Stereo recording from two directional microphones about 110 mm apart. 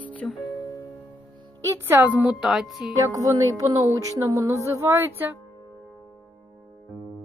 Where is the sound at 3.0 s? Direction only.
30° right (ahead or behind).